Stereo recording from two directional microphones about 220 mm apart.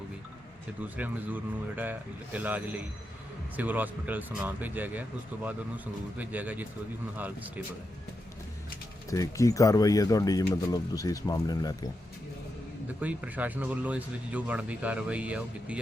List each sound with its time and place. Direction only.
0.8 s a man's voice: 5° right (ahead or behind)
9.0 s speech: 15° left (ahead or behind)
13.0 s a man's voice: 5° right (ahead or behind)